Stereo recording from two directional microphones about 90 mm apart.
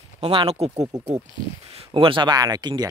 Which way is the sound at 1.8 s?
85° right.